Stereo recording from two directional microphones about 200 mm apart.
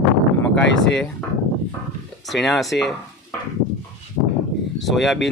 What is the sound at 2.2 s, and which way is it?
Speech, centre (ahead or behind).